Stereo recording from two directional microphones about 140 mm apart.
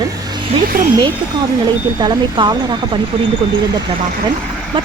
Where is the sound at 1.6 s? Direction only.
30° right (ahead or behind).